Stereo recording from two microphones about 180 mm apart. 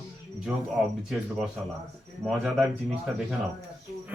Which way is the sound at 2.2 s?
Centre (ahead or behind).